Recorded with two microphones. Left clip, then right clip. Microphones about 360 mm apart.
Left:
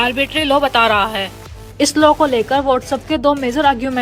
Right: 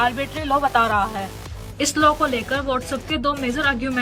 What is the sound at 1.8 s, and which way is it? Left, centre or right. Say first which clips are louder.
Speech: left 6 dB; centre.